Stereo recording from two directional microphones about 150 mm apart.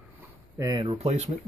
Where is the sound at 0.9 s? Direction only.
45° right (ahead or behind).